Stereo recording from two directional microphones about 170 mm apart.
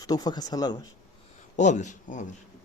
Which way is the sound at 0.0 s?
20° left (ahead or behind).